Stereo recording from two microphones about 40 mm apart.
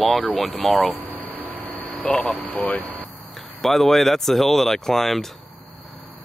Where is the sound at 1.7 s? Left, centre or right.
Left.